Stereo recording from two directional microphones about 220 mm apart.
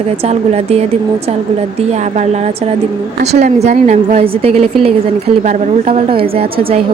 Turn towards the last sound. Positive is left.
turn(degrees=-25)  # may be behind; listen again after turning